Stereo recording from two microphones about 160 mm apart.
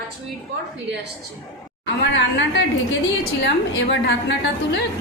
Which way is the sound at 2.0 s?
90° left.